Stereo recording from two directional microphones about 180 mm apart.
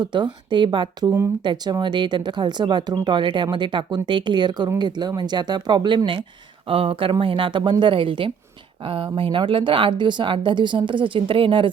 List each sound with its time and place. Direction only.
0.0 s speech: 25° right (ahead or behind)